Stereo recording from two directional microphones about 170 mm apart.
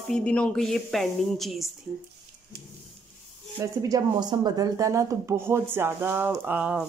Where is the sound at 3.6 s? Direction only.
20° right (ahead or behind).